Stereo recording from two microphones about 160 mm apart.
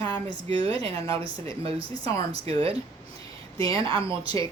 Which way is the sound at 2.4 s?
35° right (ahead or behind).